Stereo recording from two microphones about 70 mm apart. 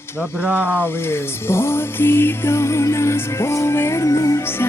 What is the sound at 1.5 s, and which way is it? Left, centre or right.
Music, left.